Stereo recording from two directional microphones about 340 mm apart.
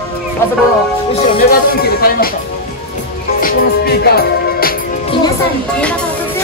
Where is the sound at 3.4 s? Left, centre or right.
Left.